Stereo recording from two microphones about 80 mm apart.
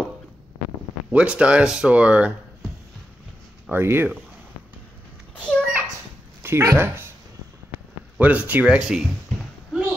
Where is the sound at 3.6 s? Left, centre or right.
Right.